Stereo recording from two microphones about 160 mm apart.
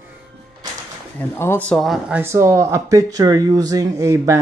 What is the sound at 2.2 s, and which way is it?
Speech, 15° right (ahead or behind).